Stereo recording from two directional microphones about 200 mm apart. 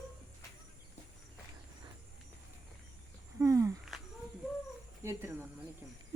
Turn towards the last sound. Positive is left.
turn(degrees=-15)  # may be behind; listen again after turning